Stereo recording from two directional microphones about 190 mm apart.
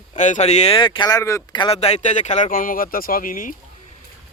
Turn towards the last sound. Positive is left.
turn(degrees=45)  # may be behind; listen again after turning